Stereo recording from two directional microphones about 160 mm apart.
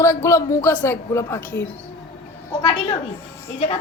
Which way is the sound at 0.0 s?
20° left (ahead or behind).